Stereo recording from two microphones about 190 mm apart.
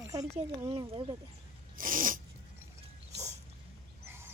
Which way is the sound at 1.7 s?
45° right (ahead or behind).